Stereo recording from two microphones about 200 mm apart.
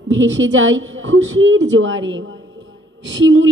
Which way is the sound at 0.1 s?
70° right (ahead or behind).